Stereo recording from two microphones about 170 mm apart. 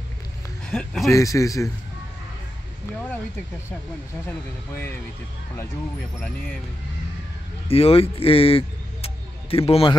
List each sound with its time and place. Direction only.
0.7 s speech: 5° left (ahead or behind)
1.0 s speech: 20° left (ahead or behind)
4.3 s speech: 10° left (ahead or behind)
6.1 s speech: 5° left (ahead or behind)
7.6 s speech: 35° left (ahead or behind)